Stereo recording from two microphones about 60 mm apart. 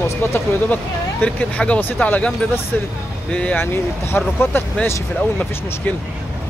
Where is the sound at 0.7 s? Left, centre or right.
Left.